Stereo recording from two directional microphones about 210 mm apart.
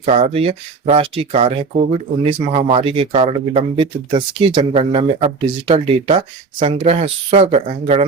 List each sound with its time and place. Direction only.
0.0 s speech: 30° right (ahead or behind)